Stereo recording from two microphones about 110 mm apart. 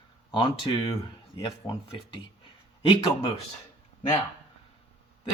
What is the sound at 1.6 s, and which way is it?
Speech, 30° left (ahead or behind).